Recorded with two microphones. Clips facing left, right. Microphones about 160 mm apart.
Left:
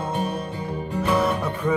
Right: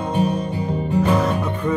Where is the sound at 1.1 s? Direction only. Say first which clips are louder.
Right 2 dB; 10° left (ahead or behind).